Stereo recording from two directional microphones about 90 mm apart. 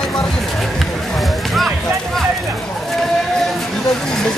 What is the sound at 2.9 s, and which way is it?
Vehicle, 5° left (ahead or behind).